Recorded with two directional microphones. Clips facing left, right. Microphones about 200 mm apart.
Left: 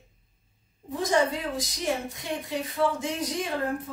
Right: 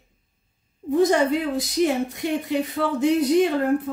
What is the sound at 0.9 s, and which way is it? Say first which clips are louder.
Speech: right 7 dB; 65° right (ahead or behind).